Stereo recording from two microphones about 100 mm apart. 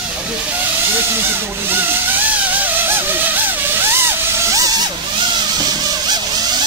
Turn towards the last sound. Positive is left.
turn(degrees=-35)  # may be behind; listen again after turning